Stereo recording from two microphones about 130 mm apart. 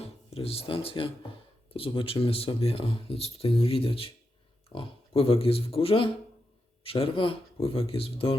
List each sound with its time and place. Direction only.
0.0 s speech: 50° left (ahead or behind)